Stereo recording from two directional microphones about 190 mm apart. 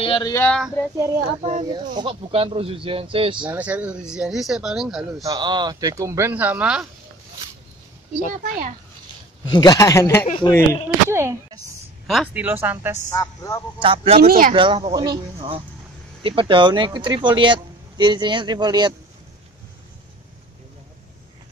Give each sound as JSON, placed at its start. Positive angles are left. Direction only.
{"t": 0.0, "sound": "speech", "side_deg": 25}
{"t": 0.3, "sound": "a man's voice", "side_deg": 10}
{"t": 1.4, "sound": "speech", "side_deg": -40}
{"t": 1.7, "sound": "speech", "side_deg": -25}
{"t": 3.3, "sound": "speech", "side_deg": -10}
{"t": 5.2, "sound": "speech", "side_deg": -20}
{"t": 8.3, "sound": "speech", "side_deg": -45}
{"t": 9.5, "sound": "a man's voice", "side_deg": 20}
{"t": 10.2, "sound": "speech", "side_deg": 30}
{"t": 11.1, "sound": "speech", "side_deg": -15}
{"t": 13.1, "sound": "a woman's voice", "side_deg": 20}
{"t": 13.7, "sound": "speech", "side_deg": -30}
{"t": 14.2, "sound": "speech", "side_deg": -50}
{"t": 14.5, "sound": "speech", "side_deg": -25}